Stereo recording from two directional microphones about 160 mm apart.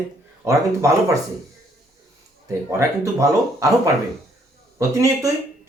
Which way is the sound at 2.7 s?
20° right (ahead or behind).